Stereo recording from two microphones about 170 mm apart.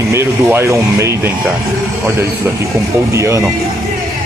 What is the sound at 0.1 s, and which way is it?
Speech, 15° right (ahead or behind).